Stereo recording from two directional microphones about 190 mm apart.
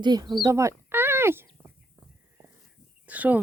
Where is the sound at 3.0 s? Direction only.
10° right (ahead or behind).